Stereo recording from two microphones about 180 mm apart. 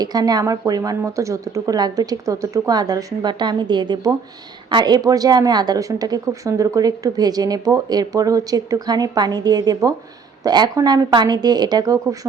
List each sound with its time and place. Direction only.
0.0 s a woman's voice: 20° right (ahead or behind)